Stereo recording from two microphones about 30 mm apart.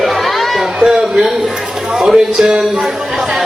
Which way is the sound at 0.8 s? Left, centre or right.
Right.